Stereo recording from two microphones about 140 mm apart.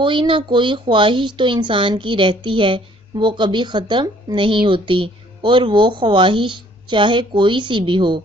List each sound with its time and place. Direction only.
0.0 s speech: 35° right (ahead or behind)